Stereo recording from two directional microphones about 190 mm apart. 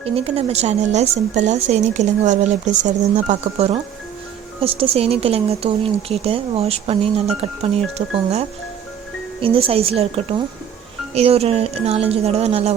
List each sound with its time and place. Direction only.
0.0 s speech: 35° right (ahead or behind)